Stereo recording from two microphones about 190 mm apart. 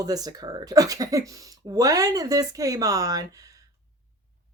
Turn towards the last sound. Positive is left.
turn(degrees=-20)  # may be behind; listen again after turning